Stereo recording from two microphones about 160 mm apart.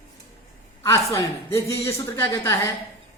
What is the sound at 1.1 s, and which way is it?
A man's voice, 20° left (ahead or behind).